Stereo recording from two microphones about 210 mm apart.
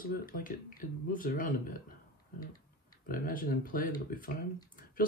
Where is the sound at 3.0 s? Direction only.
45° left (ahead or behind).